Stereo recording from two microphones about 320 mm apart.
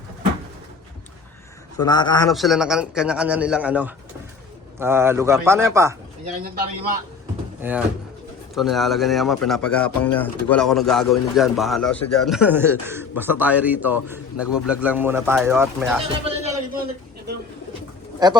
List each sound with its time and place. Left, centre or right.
1.8 s a man's voice: centre
2.3 s speech: centre
7.6 s speech: centre
16.2 s a sound: centre
18.2 s speech: centre